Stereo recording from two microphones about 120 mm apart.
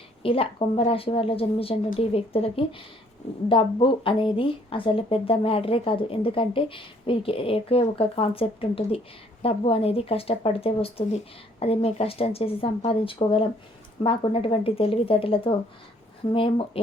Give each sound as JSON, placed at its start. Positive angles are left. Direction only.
{"t": 0.2, "sound": "speech", "side_deg": 50}